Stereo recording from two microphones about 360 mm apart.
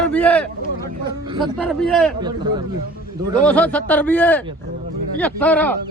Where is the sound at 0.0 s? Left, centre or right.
Centre.